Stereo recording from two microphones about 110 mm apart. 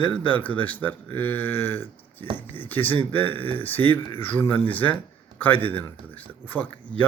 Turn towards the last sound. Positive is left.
turn(degrees=15)  # may be behind; listen again after turning